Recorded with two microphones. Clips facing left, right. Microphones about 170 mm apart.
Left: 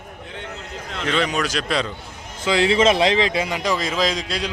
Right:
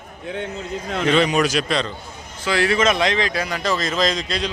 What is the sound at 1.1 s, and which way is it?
Speech, 15° right (ahead or behind).